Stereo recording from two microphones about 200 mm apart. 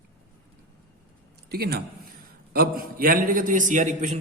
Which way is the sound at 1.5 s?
50° right (ahead or behind).